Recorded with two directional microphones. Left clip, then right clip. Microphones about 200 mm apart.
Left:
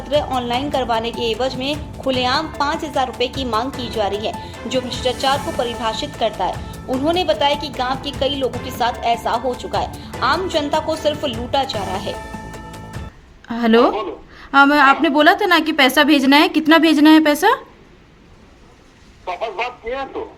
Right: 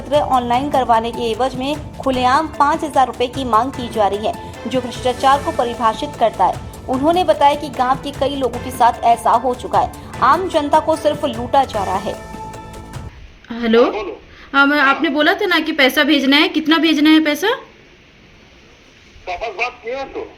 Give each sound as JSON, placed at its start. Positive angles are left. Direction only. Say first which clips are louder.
{"t": 0.1, "sound": "speech", "louder": "right 4 dB", "side_deg": -5}
{"t": 13.5, "sound": "a woman's voice", "louder": "even", "side_deg": 25}